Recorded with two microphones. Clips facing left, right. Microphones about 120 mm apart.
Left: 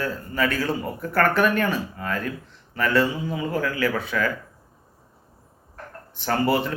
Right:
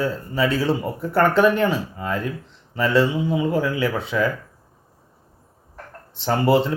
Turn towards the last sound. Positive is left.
turn(degrees=-25)  # may be behind; listen again after turning